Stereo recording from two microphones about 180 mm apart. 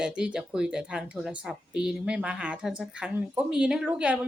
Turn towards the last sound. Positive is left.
turn(degrees=-5)  # may be behind; listen again after turning